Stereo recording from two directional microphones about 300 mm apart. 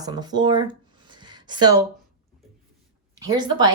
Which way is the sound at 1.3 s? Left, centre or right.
Centre.